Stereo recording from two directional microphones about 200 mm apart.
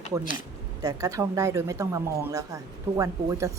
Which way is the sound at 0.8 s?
15° right (ahead or behind).